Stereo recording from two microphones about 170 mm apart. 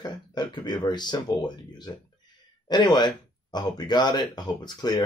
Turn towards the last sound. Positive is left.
turn(degrees=25)  # may be behind; listen again after turning